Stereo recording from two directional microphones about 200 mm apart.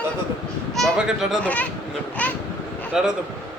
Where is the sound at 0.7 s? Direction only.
Centre (ahead or behind).